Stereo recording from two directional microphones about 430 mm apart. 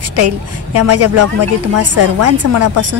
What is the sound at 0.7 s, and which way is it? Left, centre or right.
A woman's voice, right.